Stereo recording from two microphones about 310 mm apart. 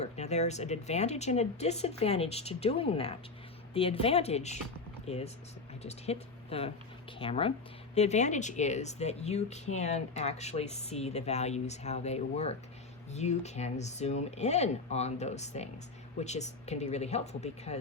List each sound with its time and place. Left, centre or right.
0.0 s speech: left